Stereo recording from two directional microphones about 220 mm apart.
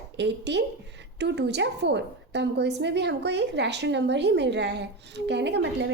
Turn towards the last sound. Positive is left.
turn(degrees=-50)  # may be behind; listen again after turning